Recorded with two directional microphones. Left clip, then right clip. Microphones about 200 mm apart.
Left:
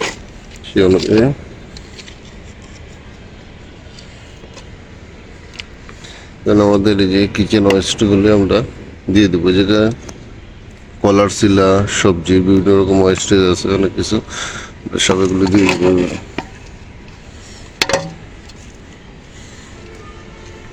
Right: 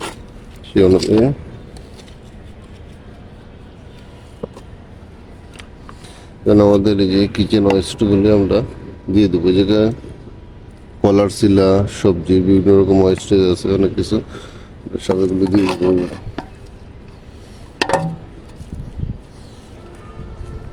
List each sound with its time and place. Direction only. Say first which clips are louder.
0.6 s speech: even; 10° right (ahead or behind)
6.4 s a sound: even; 15° right (ahead or behind)
6.7 s speech: left 1 dB; 5° right (ahead or behind)
11.0 s speech: left 2 dB; 5° right (ahead or behind)
13.1 s speech: left 2 dB; 5° left (ahead or behind)
15.4 s speech: left 5 dB; 15° right (ahead or behind)